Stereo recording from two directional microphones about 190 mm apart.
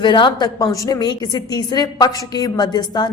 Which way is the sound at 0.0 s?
25° left (ahead or behind).